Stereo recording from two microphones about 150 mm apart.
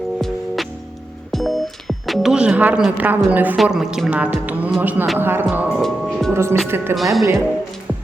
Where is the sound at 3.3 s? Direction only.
10° right (ahead or behind).